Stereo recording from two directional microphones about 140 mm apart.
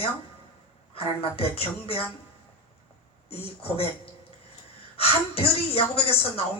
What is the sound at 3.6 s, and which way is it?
A woman's voice, 45° left (ahead or behind).